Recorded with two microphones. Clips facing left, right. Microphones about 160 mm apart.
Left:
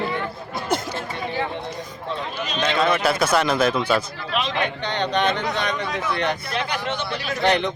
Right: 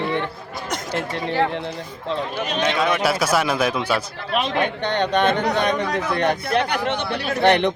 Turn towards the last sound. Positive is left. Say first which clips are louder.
# right 4 dB
turn(degrees=-60)  # may be behind; listen again after turning